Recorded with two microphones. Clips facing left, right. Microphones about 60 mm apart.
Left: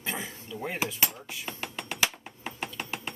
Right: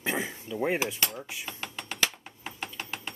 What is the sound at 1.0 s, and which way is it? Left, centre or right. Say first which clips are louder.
Dishes: left 1 dB; centre.